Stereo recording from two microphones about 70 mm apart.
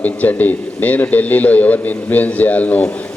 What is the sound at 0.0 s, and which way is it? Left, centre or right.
A man's voice, left.